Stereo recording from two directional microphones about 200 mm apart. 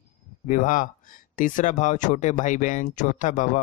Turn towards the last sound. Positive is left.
turn(degrees=40)  # may be behind; listen again after turning